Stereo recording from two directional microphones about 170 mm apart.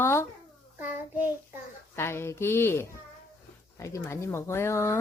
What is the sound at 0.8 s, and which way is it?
Child singing, 10° right (ahead or behind).